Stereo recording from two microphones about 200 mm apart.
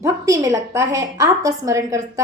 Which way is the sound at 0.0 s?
15° right (ahead or behind).